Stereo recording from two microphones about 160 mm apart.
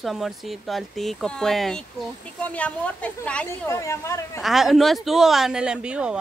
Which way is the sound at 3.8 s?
20° left (ahead or behind).